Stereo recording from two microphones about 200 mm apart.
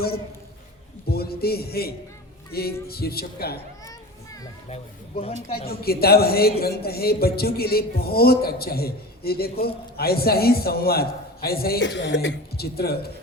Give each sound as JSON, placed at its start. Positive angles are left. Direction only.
{"t": 1.0, "sound": "a man's voice", "side_deg": 50}
{"t": 4.7, "sound": "speech", "side_deg": 30}
{"t": 5.5, "sound": "a man's voice", "side_deg": 50}